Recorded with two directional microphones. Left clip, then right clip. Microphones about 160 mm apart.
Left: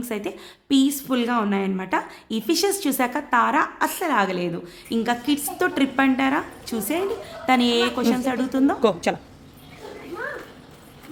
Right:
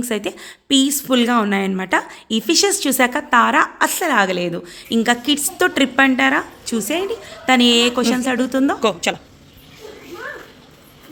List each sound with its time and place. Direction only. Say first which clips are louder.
0.0 s a woman's voice: right 6 dB; 25° right (ahead or behind)
8.8 s a woman's voice: right 2 dB; 5° left (ahead or behind)